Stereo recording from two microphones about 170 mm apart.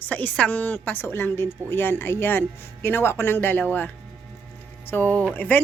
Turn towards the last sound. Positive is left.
turn(degrees=10)  # may be behind; listen again after turning